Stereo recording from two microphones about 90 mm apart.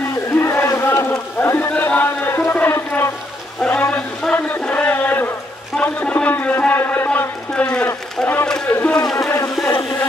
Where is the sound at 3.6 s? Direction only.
20° left (ahead or behind).